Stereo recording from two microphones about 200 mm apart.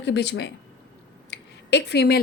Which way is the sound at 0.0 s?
60° left (ahead or behind).